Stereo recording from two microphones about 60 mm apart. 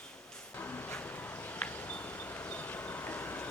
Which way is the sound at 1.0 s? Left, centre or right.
Left.